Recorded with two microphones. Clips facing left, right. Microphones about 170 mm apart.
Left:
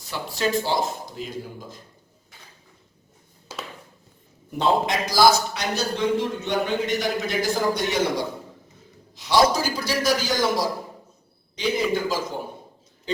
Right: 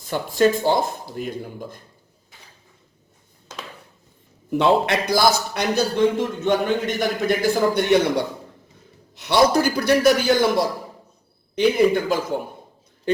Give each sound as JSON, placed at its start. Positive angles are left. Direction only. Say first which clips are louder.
{"t": 0.1, "sound": "speech", "louder": "right 6 dB", "side_deg": -50}
{"t": 4.5, "sound": "a man's voice", "louder": "right 4 dB", "side_deg": -65}
{"t": 5.5, "sound": "a man's voice", "louder": "right 6 dB", "side_deg": -55}